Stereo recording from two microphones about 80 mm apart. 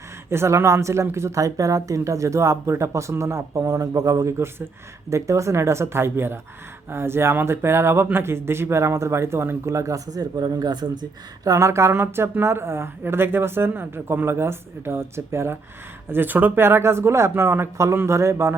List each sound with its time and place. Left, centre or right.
0.3 s a woman's voice: right
11.4 s a woman's voice: right